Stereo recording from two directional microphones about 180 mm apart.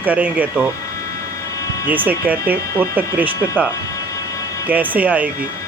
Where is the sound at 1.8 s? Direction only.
10° right (ahead or behind).